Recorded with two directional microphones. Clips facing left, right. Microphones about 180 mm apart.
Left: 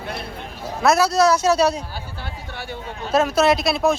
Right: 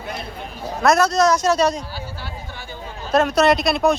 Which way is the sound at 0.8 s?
5° left (ahead or behind).